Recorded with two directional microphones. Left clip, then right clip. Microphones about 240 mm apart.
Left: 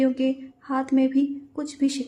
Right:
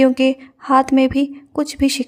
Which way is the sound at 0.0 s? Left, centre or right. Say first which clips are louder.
Right 9 dB; right.